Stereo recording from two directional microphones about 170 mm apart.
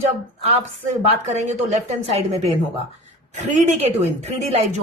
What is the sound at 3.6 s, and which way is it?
Speech, 40° right (ahead or behind).